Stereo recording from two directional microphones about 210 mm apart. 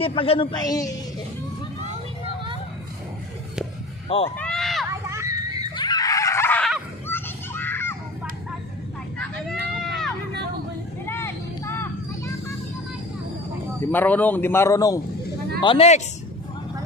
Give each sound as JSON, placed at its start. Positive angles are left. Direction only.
{"t": 0.0, "sound": "a man's voice", "side_deg": 25}
{"t": 4.4, "sound": "run", "side_deg": 0}
{"t": 4.8, "sound": "children playing", "side_deg": -15}
{"t": 5.8, "sound": "screaming", "side_deg": 20}
{"t": 7.1, "sound": "children playing", "side_deg": 10}
{"t": 9.8, "sound": "run", "side_deg": 0}
{"t": 11.1, "sound": "vehicle", "side_deg": 10}
{"t": 13.9, "sound": "a man's voice", "side_deg": 10}
{"t": 15.6, "sound": "a man's voice", "side_deg": 25}